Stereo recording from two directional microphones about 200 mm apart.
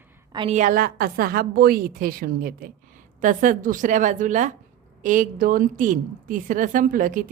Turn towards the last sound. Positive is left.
turn(degrees=-45)  # may be behind; listen again after turning